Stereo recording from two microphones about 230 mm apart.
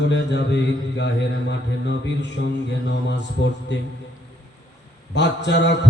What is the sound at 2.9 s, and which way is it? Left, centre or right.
Mantra, left.